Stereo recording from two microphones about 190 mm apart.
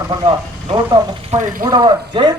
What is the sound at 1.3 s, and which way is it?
Speech, 40° right (ahead or behind).